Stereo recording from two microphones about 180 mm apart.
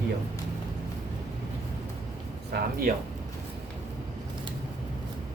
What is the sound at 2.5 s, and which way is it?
Speech, 65° right (ahead or behind).